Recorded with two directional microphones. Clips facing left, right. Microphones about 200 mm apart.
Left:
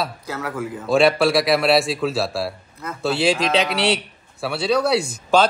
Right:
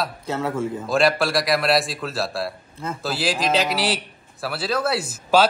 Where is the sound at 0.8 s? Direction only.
Centre (ahead or behind).